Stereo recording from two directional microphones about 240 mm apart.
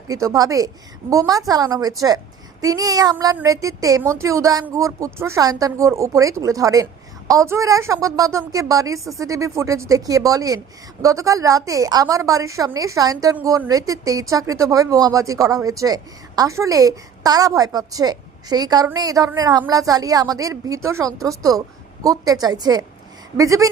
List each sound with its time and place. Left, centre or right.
0.1 s speech: centre